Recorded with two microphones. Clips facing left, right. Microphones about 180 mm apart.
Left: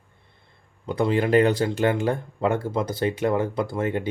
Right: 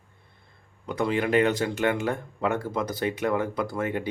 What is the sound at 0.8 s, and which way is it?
Speech, 30° left (ahead or behind).